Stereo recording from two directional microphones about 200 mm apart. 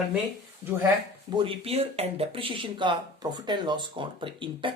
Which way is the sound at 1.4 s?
25° right (ahead or behind).